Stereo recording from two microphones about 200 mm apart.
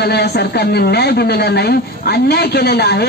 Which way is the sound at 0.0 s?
55° left (ahead or behind).